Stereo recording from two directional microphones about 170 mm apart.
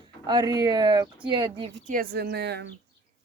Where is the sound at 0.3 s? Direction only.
25° right (ahead or behind).